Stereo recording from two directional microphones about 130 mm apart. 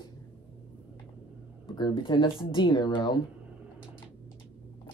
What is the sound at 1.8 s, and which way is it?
Speech, 40° left (ahead or behind).